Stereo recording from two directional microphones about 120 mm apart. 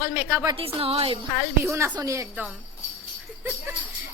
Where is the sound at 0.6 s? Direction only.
50° right (ahead or behind).